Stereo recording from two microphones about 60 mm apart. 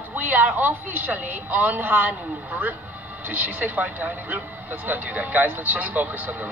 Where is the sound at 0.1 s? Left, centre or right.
Right.